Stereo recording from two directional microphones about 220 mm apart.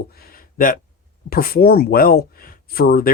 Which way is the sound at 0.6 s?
40° left (ahead or behind).